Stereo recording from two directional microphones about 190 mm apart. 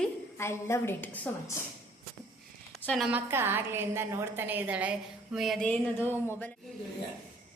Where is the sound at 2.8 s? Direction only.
5° left (ahead or behind).